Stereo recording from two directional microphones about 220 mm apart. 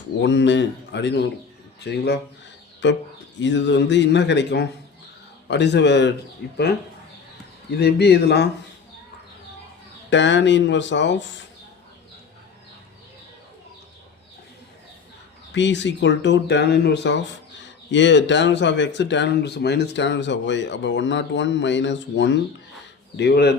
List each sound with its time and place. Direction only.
0.2 s speech: 55° left (ahead or behind)
7.7 s speech: 45° left (ahead or behind)
10.1 s speech: 55° left (ahead or behind)
15.5 s speech: 55° left (ahead or behind)